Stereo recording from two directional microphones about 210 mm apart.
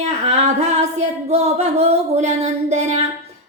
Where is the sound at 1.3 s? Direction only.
30° right (ahead or behind).